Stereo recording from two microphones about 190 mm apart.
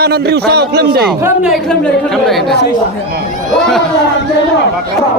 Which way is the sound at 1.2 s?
5° right (ahead or behind).